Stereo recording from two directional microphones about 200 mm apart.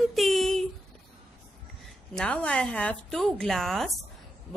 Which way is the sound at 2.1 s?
5° left (ahead or behind).